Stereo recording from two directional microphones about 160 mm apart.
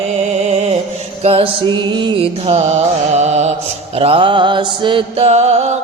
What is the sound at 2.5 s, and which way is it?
Music, 45° right (ahead or behind).